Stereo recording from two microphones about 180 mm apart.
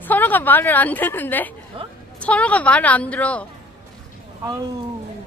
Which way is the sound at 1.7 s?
30° right (ahead or behind).